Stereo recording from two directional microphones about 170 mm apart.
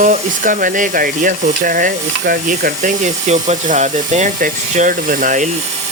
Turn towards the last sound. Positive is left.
turn(degrees=-50)  # may be behind; listen again after turning